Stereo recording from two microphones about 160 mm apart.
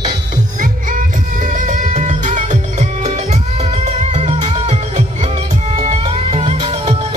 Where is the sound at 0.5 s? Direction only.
55° right (ahead or behind).